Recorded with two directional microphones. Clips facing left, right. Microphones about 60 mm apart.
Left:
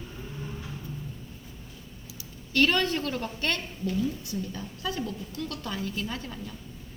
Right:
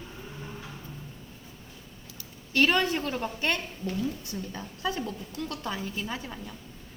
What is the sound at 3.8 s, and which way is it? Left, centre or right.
A woman's voice, right.